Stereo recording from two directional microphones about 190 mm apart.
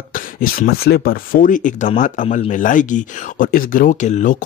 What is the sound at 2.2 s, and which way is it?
Speech, 30° left (ahead or behind).